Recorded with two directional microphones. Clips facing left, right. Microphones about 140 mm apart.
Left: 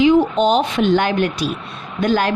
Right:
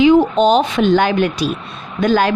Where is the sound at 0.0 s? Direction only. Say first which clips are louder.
Right 3 dB; 90° right.